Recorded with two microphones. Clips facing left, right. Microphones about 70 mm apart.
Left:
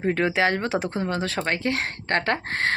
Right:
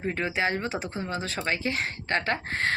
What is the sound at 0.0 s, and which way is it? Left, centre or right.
Speech, left.